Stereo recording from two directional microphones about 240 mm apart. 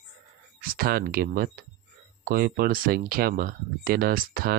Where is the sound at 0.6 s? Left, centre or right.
Right.